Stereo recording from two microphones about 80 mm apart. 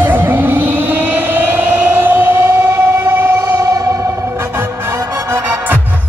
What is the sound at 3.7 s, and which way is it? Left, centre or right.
Music, right.